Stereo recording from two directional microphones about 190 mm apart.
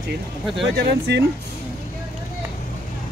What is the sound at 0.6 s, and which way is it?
Speech, 60° right (ahead or behind).